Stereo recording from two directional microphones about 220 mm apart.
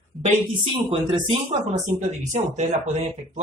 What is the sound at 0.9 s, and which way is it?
Speech, 25° right (ahead or behind).